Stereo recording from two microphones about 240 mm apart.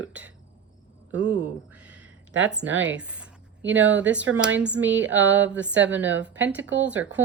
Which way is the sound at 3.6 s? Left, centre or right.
Right.